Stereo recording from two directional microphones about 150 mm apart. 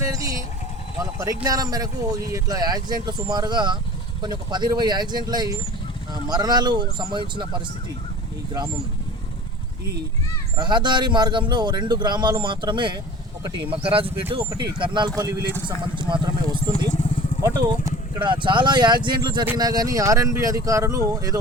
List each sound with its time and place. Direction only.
0.0 s vehicle: 25° right (ahead or behind)
0.9 s a man's voice: 25° right (ahead or behind)
10.6 s a man's voice: 30° right (ahead or behind)
16.7 s vehicle: 55° left (ahead or behind)
18.2 s a man's voice: 35° right (ahead or behind)